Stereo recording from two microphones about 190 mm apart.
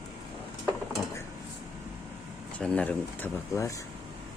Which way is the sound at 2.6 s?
5° left (ahead or behind).